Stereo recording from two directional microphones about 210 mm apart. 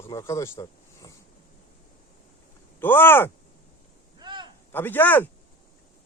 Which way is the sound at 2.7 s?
10° left (ahead or behind).